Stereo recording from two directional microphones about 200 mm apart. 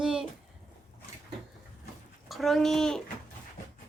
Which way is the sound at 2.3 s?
Centre (ahead or behind).